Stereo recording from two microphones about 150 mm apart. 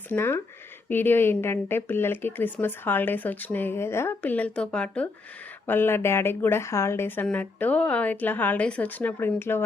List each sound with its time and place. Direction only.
0.1 s a woman's voice: 15° left (ahead or behind)